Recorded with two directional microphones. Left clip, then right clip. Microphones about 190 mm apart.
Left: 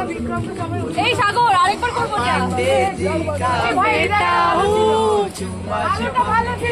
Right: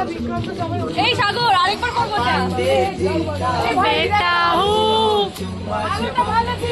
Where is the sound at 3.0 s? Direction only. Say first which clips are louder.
Left 1 dB; 10° left (ahead or behind).